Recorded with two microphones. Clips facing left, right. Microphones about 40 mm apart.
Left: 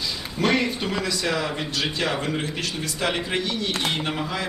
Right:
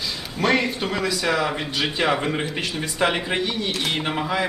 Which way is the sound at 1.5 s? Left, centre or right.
Centre.